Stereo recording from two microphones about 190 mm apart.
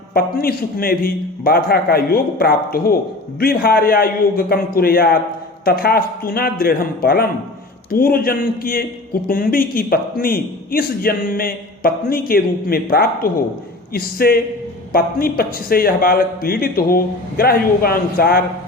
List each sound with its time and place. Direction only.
0.1 s a man's voice: 50° left (ahead or behind)